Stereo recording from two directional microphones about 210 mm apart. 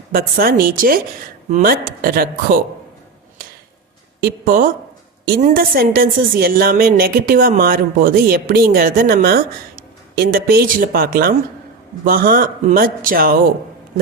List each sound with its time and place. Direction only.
0.1 s a woman's voice: 45° right (ahead or behind)
4.2 s a woman's voice: 45° right (ahead or behind)